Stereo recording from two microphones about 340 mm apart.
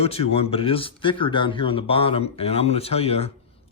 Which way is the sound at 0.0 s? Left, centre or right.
Centre.